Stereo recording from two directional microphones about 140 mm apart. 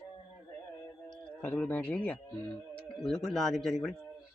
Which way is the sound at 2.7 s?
5° left (ahead or behind).